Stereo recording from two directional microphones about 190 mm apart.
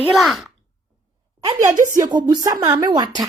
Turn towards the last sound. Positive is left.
turn(degrees=-20)  # may be behind; listen again after turning